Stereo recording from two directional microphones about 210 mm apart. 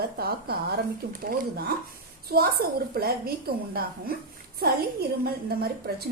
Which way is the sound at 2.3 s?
45° right (ahead or behind).